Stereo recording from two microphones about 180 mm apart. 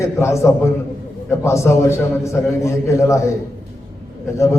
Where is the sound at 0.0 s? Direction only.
15° left (ahead or behind).